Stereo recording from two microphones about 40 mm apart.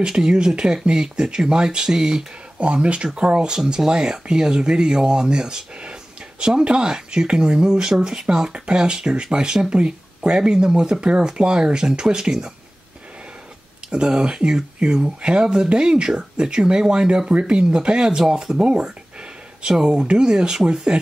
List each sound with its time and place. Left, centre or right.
0.0 s speech: centre
2.6 s speech: right
13.8 s speech: centre
17.3 s speech: right
19.9 s speech: right